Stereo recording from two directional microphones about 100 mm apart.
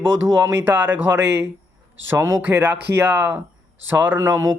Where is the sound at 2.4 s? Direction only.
20° right (ahead or behind).